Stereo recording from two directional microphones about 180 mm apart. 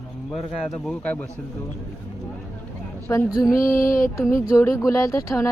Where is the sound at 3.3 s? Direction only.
15° left (ahead or behind).